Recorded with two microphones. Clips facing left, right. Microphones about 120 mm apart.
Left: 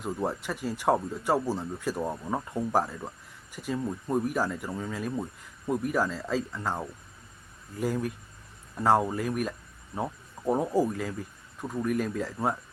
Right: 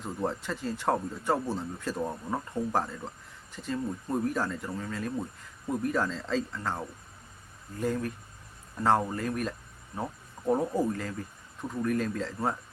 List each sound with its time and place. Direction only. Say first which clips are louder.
0.0 s speech: left 2 dB; 15° left (ahead or behind)